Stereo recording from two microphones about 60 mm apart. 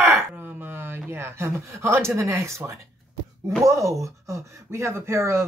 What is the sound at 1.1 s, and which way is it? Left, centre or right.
Speech, right.